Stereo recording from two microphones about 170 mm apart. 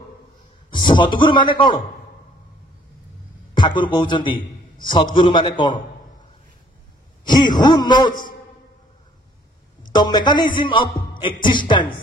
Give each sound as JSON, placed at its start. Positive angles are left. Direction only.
{"t": 0.7, "sound": "a man's voice", "side_deg": 25}
{"t": 3.5, "sound": "a man's voice", "side_deg": 25}
{"t": 7.2, "sound": "a man's voice", "side_deg": 25}
{"t": 9.9, "sound": "a man's voice", "side_deg": 25}